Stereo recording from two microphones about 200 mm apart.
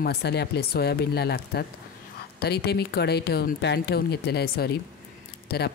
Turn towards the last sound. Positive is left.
turn(degrees=55)  # may be behind; listen again after turning